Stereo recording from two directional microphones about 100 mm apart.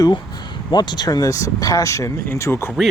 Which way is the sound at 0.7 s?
45° left (ahead or behind).